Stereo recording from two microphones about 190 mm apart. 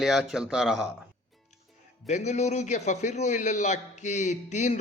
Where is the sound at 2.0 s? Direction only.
35° left (ahead or behind).